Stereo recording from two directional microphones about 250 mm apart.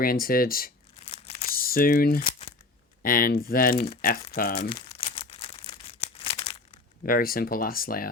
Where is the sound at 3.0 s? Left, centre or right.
Left.